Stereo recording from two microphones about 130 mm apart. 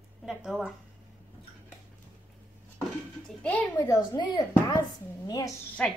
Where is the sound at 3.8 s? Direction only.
35° left (ahead or behind).